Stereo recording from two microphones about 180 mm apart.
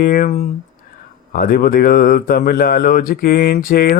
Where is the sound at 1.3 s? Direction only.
55° left (ahead or behind).